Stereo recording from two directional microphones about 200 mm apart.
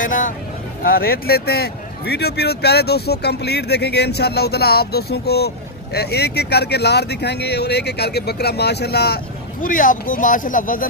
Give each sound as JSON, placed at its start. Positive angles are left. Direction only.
{"t": 0.0, "sound": "speech", "side_deg": 40}